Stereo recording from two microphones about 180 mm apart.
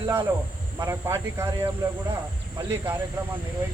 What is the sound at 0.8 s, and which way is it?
Speech, 15° right (ahead or behind).